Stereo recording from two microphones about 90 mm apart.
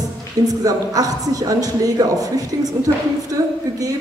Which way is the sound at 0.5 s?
45° right (ahead or behind).